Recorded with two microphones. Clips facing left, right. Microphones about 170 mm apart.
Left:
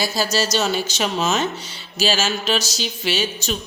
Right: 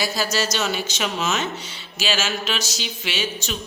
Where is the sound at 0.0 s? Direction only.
30° left (ahead or behind).